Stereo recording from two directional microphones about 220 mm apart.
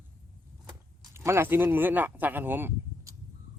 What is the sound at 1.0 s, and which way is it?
Speech, 10° right (ahead or behind).